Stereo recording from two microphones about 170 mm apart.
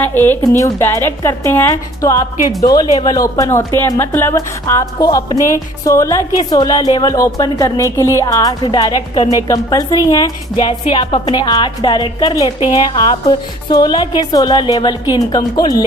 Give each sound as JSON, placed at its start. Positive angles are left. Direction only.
{"t": 0.0, "sound": "a woman's voice", "side_deg": 10}